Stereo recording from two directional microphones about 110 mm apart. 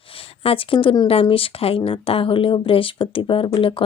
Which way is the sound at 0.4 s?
55° left (ahead or behind).